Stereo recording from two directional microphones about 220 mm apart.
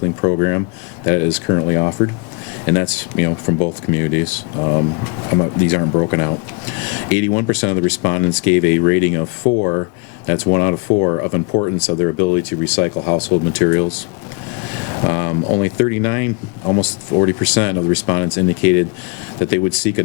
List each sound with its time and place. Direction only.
0.2 s speech: 20° left (ahead or behind)
9.5 s speech: 40° left (ahead or behind)
10.2 s speech: 10° left (ahead or behind)
15.0 s speech: 15° left (ahead or behind)